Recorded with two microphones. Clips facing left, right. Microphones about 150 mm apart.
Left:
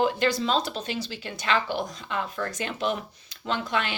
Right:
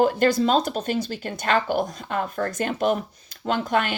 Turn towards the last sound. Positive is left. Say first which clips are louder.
# right 5 dB
turn(degrees=-50)  # may be behind; listen again after turning